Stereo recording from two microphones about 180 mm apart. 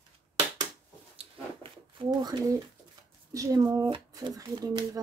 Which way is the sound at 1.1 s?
25° right (ahead or behind).